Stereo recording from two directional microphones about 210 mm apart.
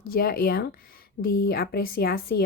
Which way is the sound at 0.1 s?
45° left (ahead or behind).